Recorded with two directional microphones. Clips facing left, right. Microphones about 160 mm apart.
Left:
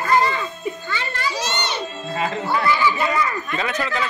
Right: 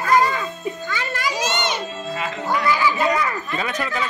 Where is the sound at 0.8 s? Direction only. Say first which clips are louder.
Right 1 dB; 10° right (ahead or behind).